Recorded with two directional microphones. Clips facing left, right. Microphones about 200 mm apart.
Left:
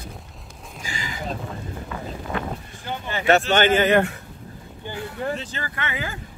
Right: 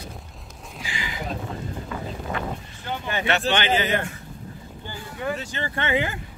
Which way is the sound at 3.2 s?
45° left (ahead or behind).